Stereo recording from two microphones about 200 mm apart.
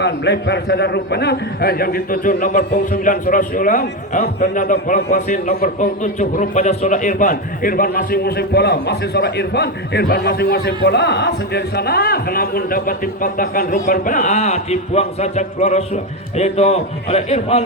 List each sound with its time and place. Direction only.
0.0 s a man's voice: 60° left (ahead or behind); by 17.6 s 30° left (ahead or behind)